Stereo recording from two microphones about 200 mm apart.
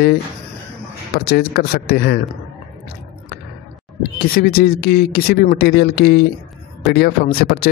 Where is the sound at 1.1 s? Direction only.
50° left (ahead or behind).